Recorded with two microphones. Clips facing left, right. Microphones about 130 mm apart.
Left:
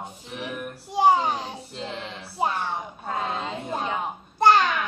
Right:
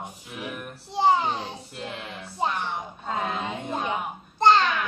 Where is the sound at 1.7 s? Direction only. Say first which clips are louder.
Left 4 dB; 25° left (ahead or behind).